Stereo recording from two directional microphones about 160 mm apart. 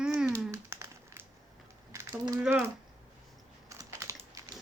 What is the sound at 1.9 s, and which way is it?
Mechanisms, 15° right (ahead or behind).